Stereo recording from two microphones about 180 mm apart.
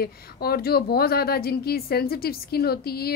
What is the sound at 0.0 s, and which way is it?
A woman's voice, 60° left (ahead or behind).